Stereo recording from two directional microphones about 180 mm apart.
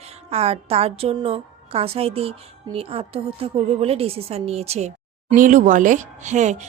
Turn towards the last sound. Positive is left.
turn(degrees=-40)  # may be behind; listen again after turning